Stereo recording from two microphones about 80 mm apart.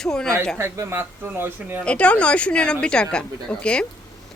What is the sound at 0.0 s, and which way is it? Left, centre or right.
Speech, centre.